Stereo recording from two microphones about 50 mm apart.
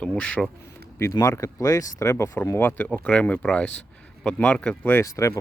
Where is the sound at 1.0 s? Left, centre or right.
Left.